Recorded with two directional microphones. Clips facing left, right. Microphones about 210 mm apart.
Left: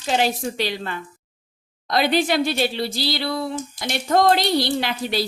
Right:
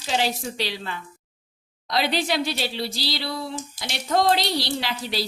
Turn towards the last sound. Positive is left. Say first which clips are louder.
# left 4 dB
turn(degrees=55)  # may be behind; listen again after turning